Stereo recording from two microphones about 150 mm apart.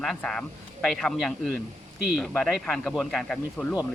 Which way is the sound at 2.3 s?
10° left (ahead or behind).